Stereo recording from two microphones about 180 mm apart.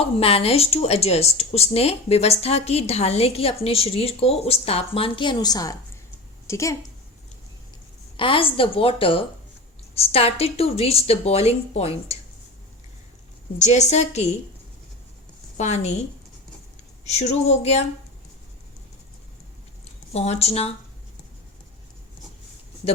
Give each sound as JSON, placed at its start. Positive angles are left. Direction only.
{"t": 0.2, "sound": "a woman's voice", "side_deg": 30}
{"t": 8.1, "sound": "a woman's voice", "side_deg": 30}
{"t": 13.6, "sound": "a woman's voice", "side_deg": 40}
{"t": 15.5, "sound": "a woman's voice", "side_deg": 40}
{"t": 17.1, "sound": "a woman's voice", "side_deg": 40}
{"t": 20.1, "sound": "a woman's voice", "side_deg": 35}